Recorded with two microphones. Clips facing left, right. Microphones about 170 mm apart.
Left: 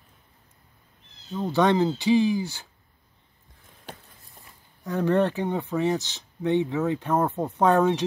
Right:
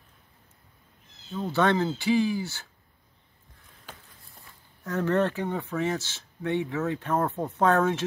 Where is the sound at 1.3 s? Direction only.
15° left (ahead or behind).